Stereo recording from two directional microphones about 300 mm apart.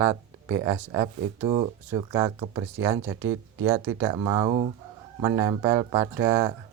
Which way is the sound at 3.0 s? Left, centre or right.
Right.